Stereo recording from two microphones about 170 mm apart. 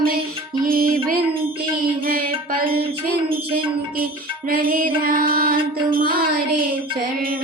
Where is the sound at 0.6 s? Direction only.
60° right (ahead or behind).